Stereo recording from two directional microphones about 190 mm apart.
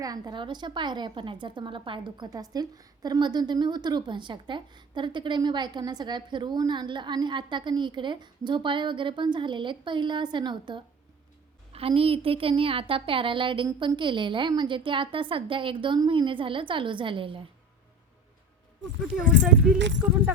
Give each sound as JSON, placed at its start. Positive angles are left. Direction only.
{"t": 0.0, "sound": "a woman's voice", "side_deg": -20}